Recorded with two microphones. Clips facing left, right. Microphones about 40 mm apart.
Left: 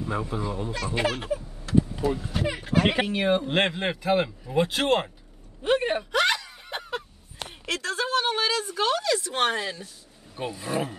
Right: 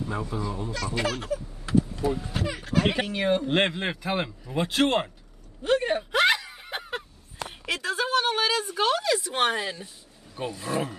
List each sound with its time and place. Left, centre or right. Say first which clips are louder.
0.0 s speech: left 1 dB; left
2.4 s speech: left 2 dB; left
3.4 s speech: even; centre
5.6 s speech: even; centre
6.1 s a sound: right 3 dB; centre
7.6 s a woman's voice: even; centre
10.3 s speech: even; centre